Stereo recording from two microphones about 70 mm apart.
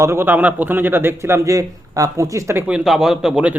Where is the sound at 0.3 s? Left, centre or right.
Right.